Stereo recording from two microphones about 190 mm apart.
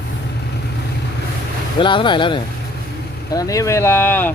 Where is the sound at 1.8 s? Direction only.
25° left (ahead or behind); by 4.3 s 10° left (ahead or behind).